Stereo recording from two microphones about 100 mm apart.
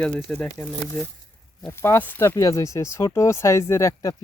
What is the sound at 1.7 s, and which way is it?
Speech, 25° left (ahead or behind).